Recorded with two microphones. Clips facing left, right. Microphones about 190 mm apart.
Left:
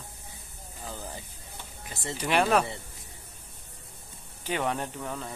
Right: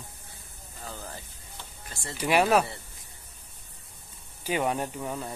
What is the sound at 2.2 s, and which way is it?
Speech, 10° right (ahead or behind).